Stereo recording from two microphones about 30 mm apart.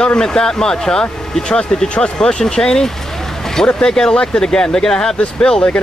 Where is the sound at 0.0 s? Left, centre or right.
Left.